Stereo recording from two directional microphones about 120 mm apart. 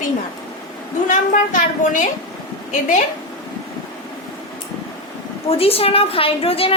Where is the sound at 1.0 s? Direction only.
90° left.